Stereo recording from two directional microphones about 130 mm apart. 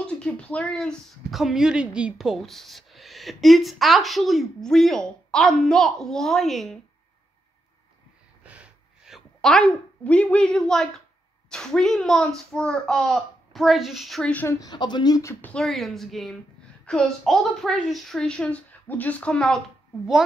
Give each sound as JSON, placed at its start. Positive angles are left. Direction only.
{"t": 0.0, "sound": "speech", "side_deg": 10}
{"t": 8.5, "sound": "a sound", "side_deg": -5}
{"t": 11.5, "sound": "speech", "side_deg": 5}
{"t": 14.6, "sound": "speech", "side_deg": 35}
{"t": 15.4, "sound": "speech", "side_deg": 5}